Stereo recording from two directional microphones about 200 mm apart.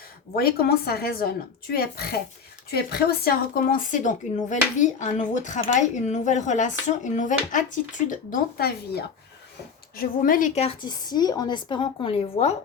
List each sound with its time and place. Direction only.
0.3 s a woman's voice: 50° left (ahead or behind); by 12.5 s 30° left (ahead or behind)